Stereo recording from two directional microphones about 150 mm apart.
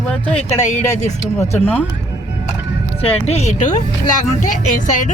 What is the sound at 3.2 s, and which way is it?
A woman's voice, 45° left (ahead or behind).